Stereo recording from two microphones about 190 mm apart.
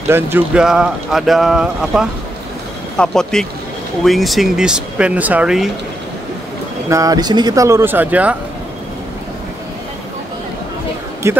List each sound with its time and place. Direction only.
0.1 s speech: 10° right (ahead or behind)
6.9 s speech: 20° right (ahead or behind)
11.2 s speech: 15° right (ahead or behind)